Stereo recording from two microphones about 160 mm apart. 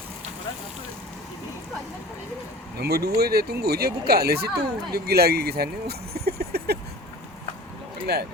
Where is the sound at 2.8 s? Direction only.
85° right.